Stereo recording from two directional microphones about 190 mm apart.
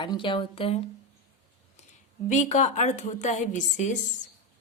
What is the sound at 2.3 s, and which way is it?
A woman's voice, 40° left (ahead or behind).